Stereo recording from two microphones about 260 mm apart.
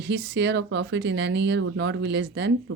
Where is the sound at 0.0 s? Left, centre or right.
Right.